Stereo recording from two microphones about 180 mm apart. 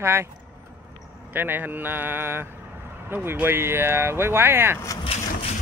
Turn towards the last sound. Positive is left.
turn(degrees=30)  # may be behind; listen again after turning